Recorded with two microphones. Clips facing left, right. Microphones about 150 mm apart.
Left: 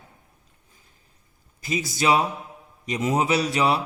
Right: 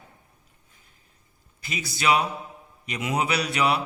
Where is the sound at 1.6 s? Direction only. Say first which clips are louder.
Left 3 dB; 45° left (ahead or behind).